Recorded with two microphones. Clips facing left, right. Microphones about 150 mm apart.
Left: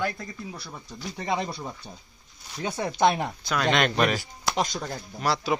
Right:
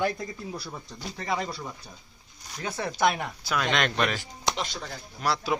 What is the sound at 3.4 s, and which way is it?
Speech, centre (ahead or behind).